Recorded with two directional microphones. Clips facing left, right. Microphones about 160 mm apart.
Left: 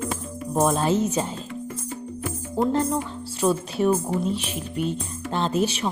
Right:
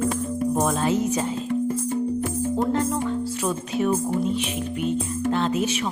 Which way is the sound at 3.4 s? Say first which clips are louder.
Left 8 dB; 35° left (ahead or behind).